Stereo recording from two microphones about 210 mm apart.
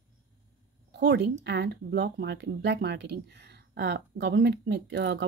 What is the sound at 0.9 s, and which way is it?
Speech, 55° right (ahead or behind).